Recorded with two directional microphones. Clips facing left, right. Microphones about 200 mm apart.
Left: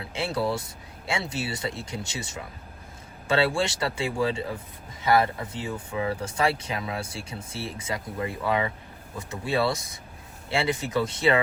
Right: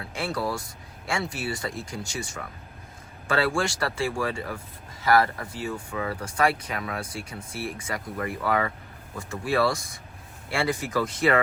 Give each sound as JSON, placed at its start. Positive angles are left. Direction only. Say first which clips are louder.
{"t": 0.1, "sound": "speech", "louder": "left 2 dB", "side_deg": 25}